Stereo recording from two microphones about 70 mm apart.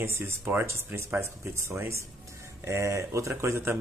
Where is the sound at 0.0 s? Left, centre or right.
Right.